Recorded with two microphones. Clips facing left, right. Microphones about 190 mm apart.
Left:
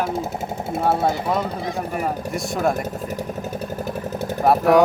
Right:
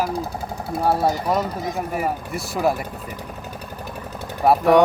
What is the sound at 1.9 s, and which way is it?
Speech, centre (ahead or behind).